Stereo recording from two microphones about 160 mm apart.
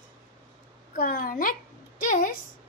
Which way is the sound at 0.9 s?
60° left (ahead or behind).